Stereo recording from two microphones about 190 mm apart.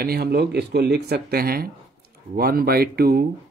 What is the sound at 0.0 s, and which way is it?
Speech, 55° right (ahead or behind).